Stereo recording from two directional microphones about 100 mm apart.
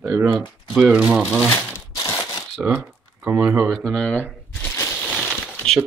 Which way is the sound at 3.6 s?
5° left (ahead or behind).